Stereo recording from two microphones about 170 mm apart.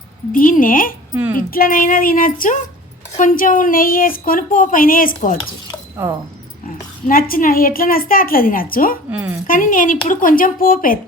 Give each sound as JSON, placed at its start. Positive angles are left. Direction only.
{"t": 0.3, "sound": "a woman's voice", "side_deg": 50}
{"t": 6.0, "sound": "speech", "side_deg": -15}
{"t": 7.1, "sound": "a woman's voice", "side_deg": 55}
{"t": 9.0, "sound": "speech", "side_deg": -10}
{"t": 9.5, "sound": "a woman's voice", "side_deg": 50}